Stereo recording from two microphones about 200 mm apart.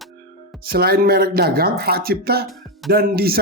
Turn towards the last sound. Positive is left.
turn(degrees=-50)  # may be behind; listen again after turning